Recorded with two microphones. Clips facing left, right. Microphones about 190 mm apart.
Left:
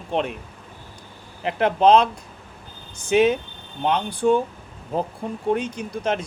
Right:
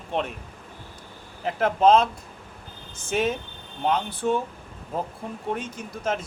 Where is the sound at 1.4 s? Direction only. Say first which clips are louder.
Left 3 dB; 80° left.